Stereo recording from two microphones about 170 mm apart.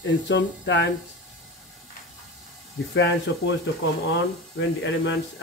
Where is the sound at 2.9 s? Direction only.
90° left.